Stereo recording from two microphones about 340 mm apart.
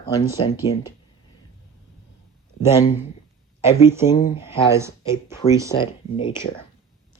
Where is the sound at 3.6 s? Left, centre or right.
Centre.